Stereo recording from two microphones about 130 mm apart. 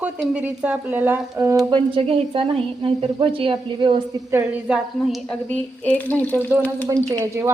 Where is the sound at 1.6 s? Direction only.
40° right (ahead or behind).